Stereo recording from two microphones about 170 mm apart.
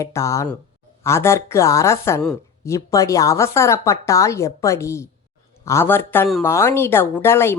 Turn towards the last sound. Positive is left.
turn(degrees=15)  # may be behind; listen again after turning